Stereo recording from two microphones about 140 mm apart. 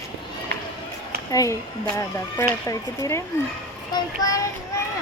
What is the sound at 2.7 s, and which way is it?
Speech, 25° left (ahead or behind).